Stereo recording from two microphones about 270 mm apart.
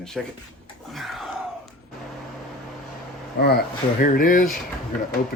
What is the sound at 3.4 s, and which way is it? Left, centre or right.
Speech, left.